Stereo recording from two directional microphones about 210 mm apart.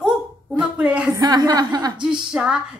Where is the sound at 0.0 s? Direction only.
5° right (ahead or behind).